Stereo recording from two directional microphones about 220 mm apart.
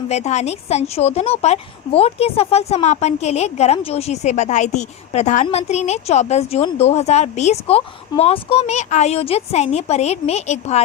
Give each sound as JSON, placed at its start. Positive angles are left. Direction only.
{"t": 0.1, "sound": "speech", "side_deg": 30}